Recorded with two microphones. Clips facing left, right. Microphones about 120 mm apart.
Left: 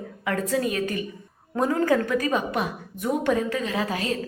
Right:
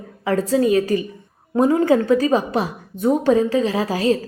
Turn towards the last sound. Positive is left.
turn(degrees=-30)  # may be behind; listen again after turning